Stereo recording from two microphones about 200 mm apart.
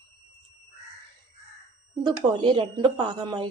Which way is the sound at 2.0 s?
25° right (ahead or behind).